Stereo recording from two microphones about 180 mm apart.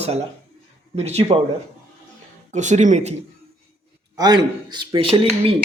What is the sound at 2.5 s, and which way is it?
Speech, 40° right (ahead or behind).